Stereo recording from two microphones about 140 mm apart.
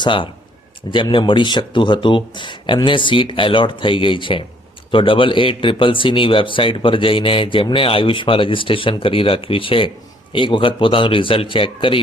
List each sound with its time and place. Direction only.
0.0 s speech: 35° left (ahead or behind)